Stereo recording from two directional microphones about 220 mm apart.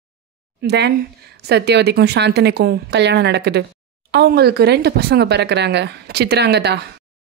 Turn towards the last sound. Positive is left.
turn(degrees=-50)  # may be behind; listen again after turning